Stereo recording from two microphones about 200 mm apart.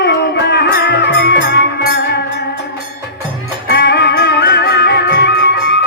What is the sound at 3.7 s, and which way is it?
Music, 55° left (ahead or behind).